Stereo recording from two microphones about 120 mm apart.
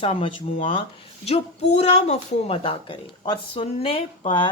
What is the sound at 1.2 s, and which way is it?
Speech, 65° left (ahead or behind).